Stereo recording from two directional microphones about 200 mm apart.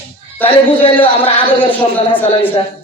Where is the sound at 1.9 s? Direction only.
10° left (ahead or behind).